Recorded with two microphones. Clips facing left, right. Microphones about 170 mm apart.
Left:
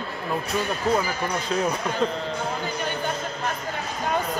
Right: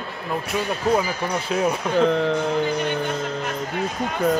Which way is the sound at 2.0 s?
65° right (ahead or behind).